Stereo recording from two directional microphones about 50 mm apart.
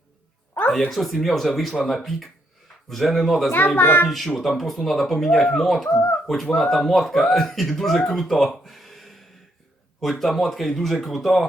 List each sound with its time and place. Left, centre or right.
0.7 s speech: centre
3.8 s a child's voice: left
4.4 s speech: centre
5.9 s speech: left
6.2 s speech: centre